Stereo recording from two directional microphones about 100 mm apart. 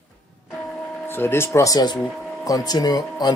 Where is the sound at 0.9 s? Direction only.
20° left (ahead or behind).